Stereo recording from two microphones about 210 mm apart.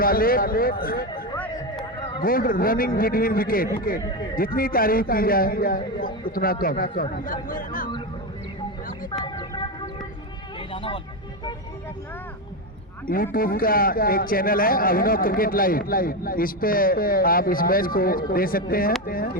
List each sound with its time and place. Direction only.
0.0 s a man's voice: 45° left (ahead or behind)
1.4 s a sound: 5° left (ahead or behind)
2.2 s a man's voice: 40° left (ahead or behind)
9.2 s a sound: 20° left (ahead or behind)
10.7 s vehicle: 25° left (ahead or behind)
13.3 s a man's voice: 45° left (ahead or behind)